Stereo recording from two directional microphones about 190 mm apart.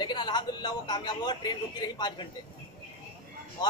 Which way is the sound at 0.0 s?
25° left (ahead or behind).